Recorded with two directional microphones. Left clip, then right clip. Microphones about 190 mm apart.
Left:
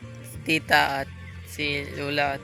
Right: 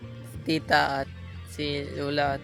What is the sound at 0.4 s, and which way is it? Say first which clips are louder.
Speech: left 3 dB; 15° right (ahead or behind).